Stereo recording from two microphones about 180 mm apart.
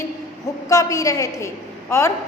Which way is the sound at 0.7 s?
20° left (ahead or behind).